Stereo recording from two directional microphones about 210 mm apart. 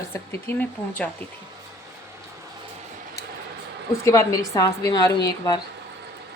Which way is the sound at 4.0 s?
15° left (ahead or behind).